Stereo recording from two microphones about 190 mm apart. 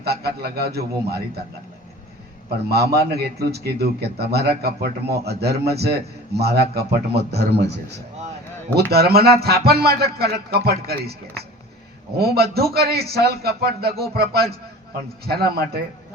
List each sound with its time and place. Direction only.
0.0 s a man's voice: 55° right (ahead or behind)
2.6 s a man's voice: 55° right (ahead or behind)